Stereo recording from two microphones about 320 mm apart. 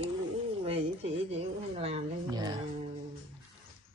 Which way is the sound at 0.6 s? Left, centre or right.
Centre.